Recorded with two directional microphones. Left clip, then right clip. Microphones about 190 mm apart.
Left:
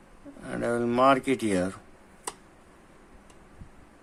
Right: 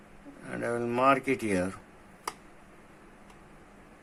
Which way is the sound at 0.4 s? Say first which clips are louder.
Left 4 dB; 20° left (ahead or behind).